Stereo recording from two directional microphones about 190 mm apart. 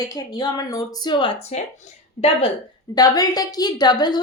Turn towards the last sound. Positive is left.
turn(degrees=20)  # may be behind; listen again after turning